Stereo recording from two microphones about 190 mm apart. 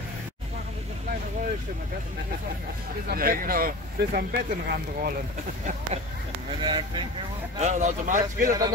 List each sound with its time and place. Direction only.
3.1 s speech: 50° right (ahead or behind)
6.6 s speech: 25° right (ahead or behind)
7.5 s a man's voice: 35° right (ahead or behind)